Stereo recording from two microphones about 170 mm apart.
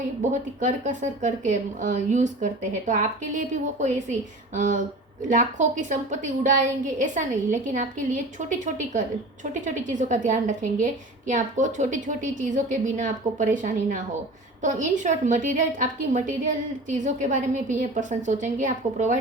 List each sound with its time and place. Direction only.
0.2 s a woman's voice: 45° right (ahead or behind)
5.3 s a woman's voice: 50° right (ahead or behind)